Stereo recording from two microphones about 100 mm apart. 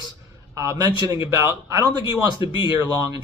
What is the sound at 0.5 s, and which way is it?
Speech, 30° right (ahead or behind).